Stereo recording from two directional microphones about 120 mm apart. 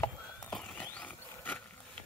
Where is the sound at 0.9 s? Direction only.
15° left (ahead or behind).